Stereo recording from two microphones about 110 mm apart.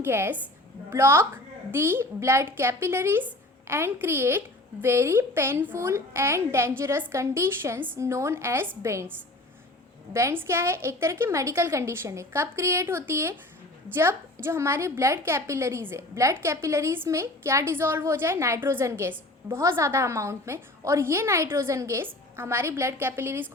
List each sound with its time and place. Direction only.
0.0 s a woman's voice: 20° right (ahead or behind)